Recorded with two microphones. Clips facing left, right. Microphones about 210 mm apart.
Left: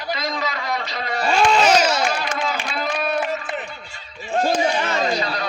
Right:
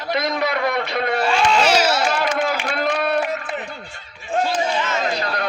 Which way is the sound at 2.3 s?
55° right (ahead or behind).